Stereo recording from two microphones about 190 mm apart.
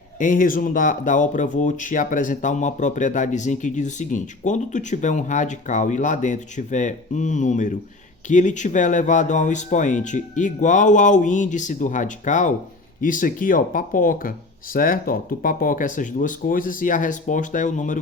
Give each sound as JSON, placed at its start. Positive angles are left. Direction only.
{"t": 0.2, "sound": "speech", "side_deg": 45}